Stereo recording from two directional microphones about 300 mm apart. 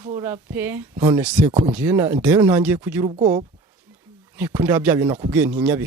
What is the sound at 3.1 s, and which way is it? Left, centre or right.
Speech, right.